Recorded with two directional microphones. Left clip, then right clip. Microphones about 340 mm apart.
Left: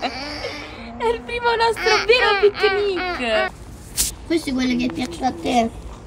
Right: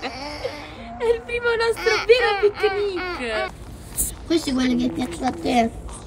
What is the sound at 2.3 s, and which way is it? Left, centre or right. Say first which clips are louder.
Speech: left 3 dB; centre.